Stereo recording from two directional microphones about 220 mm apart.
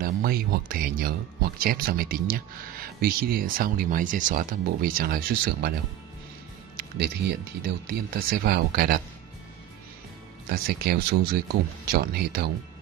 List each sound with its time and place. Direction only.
0.0 s speech: 40° right (ahead or behind)
6.8 s speech: 45° right (ahead or behind)
10.5 s speech: 45° right (ahead or behind)